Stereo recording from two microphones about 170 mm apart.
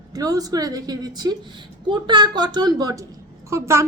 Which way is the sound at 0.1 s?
20° right (ahead or behind).